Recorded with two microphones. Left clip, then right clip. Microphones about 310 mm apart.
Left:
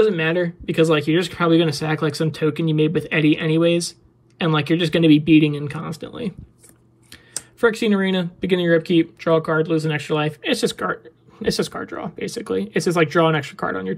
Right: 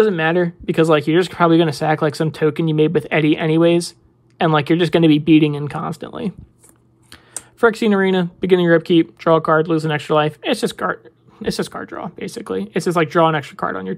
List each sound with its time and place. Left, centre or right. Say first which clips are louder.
0.0 s speech: right 2 dB; centre
7.6 s speech: right 4 dB; centre